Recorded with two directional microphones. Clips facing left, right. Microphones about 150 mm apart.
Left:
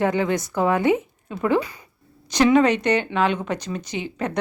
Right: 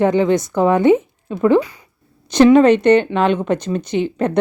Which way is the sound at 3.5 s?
55° right (ahead or behind).